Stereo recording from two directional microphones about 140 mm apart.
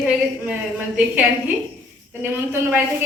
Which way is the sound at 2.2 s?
20° right (ahead or behind).